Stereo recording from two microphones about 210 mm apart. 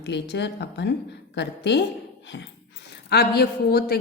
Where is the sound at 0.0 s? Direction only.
55° left (ahead or behind).